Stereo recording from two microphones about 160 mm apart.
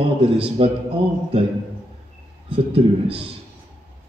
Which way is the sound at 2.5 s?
35° right (ahead or behind).